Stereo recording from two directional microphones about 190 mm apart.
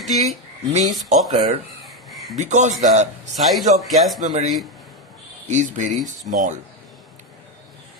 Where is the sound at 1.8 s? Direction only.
Centre (ahead or behind).